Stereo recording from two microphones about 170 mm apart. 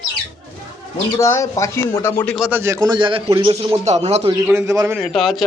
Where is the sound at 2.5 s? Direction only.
15° right (ahead or behind); by 4.3 s 40° right (ahead or behind).